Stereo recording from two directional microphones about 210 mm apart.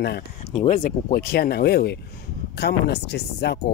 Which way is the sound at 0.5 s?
35° left (ahead or behind).